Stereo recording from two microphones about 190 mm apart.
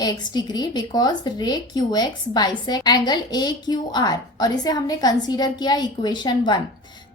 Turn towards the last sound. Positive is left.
turn(degrees=25)  # may be behind; listen again after turning